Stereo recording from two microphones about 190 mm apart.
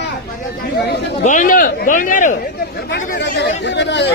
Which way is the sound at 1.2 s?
40° left (ahead or behind).